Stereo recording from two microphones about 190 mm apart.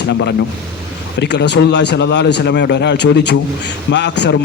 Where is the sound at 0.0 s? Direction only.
65° left (ahead or behind).